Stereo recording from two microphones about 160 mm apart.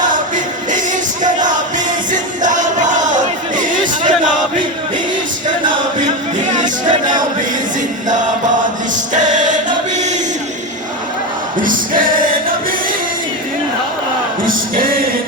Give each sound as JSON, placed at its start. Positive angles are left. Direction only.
{"t": 0.0, "sound": "singing", "side_deg": -55}
{"t": 2.1, "sound": "crowd", "side_deg": -50}
{"t": 6.4, "sound": "choir", "side_deg": -50}
{"t": 9.1, "sound": "choir", "side_deg": -50}
{"t": 11.6, "sound": "singing", "side_deg": -60}
{"t": 14.4, "sound": "music", "side_deg": -65}